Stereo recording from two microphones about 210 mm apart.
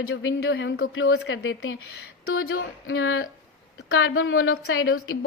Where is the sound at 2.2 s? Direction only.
80° left.